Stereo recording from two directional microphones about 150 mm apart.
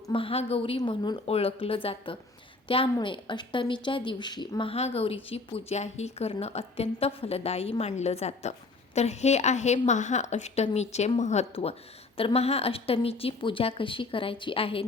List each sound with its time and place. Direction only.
0.1 s a woman's voice: 40° left (ahead or behind)